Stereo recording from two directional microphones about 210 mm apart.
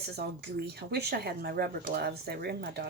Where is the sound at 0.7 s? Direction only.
50° right (ahead or behind).